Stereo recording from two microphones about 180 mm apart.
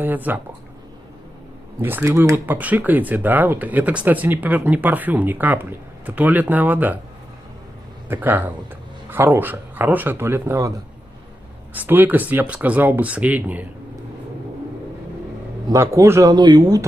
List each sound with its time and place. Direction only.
0.0 s speech: 10° right (ahead or behind)
1.8 s speech: 10° right (ahead or behind)
8.1 s speech: 10° right (ahead or behind)
11.7 s speech: 10° right (ahead or behind)
15.7 s speech: 15° right (ahead or behind)